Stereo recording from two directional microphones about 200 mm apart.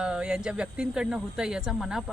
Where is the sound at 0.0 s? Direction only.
5° right (ahead or behind).